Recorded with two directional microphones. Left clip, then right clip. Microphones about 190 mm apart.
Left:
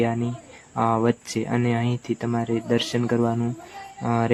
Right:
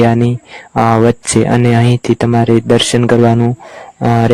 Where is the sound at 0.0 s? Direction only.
50° right (ahead or behind).